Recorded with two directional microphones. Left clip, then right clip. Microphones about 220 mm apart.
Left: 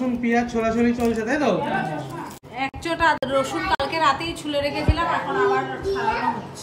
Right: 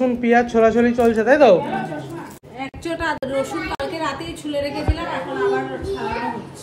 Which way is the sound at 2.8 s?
Centre (ahead or behind).